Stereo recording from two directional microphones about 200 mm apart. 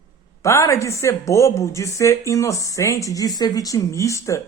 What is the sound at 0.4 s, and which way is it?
Speech, 15° left (ahead or behind).